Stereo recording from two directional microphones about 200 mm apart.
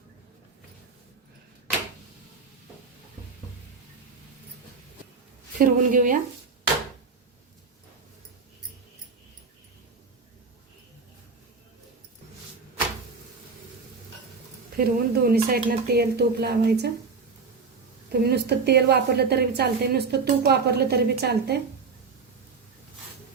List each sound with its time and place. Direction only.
5.5 s speech: 40° right (ahead or behind)
14.8 s speech: 50° right (ahead or behind)
18.1 s a woman's voice: 55° right (ahead or behind)